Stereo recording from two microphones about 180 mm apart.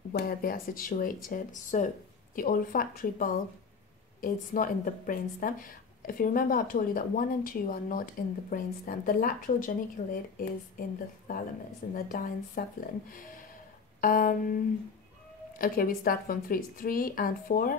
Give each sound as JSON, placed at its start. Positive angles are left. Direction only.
{"t": 0.1, "sound": "a woman's voice", "side_deg": 55}
{"t": 13.1, "sound": "a sound", "side_deg": 50}
{"t": 14.0, "sound": "a woman's voice", "side_deg": 50}